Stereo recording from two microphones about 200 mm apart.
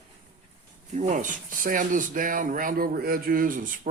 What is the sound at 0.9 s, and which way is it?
Speech, 35° right (ahead or behind).